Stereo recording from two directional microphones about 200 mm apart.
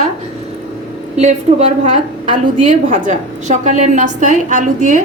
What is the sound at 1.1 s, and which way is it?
A woman's voice, 35° right (ahead or behind).